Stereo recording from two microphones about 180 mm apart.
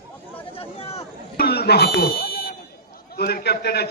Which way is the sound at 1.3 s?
60° left (ahead or behind).